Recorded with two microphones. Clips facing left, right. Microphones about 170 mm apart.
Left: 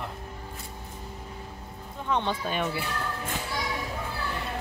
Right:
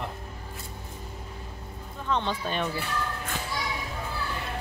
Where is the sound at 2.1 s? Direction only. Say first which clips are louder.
Even; 15° left (ahead or behind).